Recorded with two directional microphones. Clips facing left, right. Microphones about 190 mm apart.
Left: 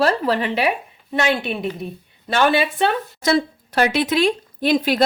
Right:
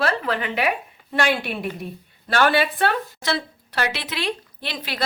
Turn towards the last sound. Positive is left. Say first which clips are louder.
# left 14 dB
turn(degrees=50)  # may be behind; listen again after turning